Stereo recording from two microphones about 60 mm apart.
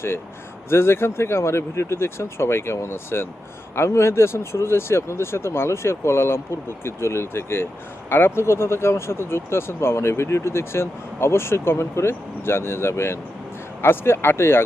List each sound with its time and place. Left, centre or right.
0.7 s speech: left